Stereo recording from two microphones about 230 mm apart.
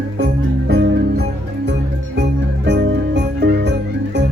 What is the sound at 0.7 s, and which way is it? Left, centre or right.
Music, right.